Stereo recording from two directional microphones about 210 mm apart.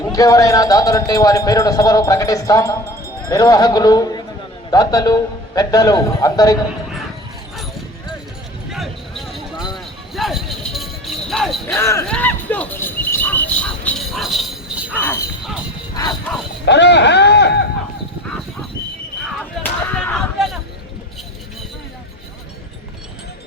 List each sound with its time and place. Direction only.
0.1 s a man's voice: 15° left (ahead or behind)
7.5 s dog: centre (ahead or behind)
8.7 s a sound: centre (ahead or behind)
11.8 s a sound: 15° left (ahead or behind); by 14.9 s 5° right (ahead or behind)
14.9 s a man's voice: 10° left (ahead or behind)
16.6 s speech: 55° left (ahead or behind)
19.9 s whip: 5° left (ahead or behind)